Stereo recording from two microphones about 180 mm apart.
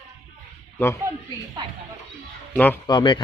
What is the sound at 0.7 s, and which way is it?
Speech, 15° left (ahead or behind).